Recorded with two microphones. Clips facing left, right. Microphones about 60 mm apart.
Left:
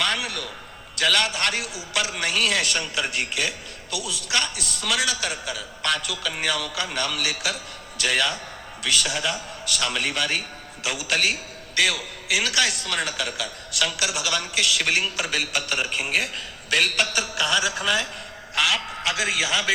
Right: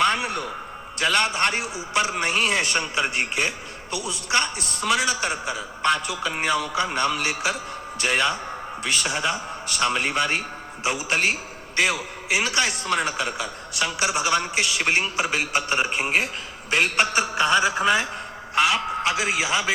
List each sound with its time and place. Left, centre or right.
0.0 s a sound: right
0.9 s a man's voice: right
17.8 s a man's voice: right